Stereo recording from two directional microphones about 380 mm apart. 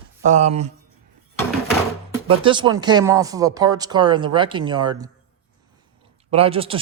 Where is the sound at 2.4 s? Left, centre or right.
Centre.